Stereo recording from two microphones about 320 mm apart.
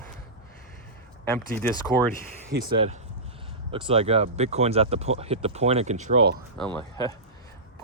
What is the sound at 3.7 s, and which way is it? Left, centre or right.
Speech, centre.